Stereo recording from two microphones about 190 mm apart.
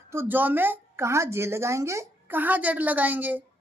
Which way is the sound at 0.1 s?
10° right (ahead or behind).